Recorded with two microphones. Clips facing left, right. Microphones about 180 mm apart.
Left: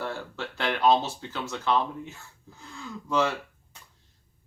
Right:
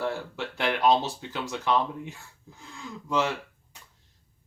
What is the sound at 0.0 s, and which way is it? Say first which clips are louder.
Speech: right 3 dB; 15° right (ahead or behind).